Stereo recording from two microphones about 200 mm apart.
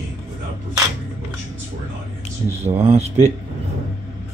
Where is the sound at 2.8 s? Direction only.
30° right (ahead or behind).